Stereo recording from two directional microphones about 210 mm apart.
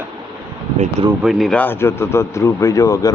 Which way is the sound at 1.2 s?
Centre (ahead or behind).